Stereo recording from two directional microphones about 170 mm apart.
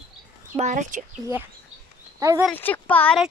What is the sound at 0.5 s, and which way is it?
Speech, 45° right (ahead or behind).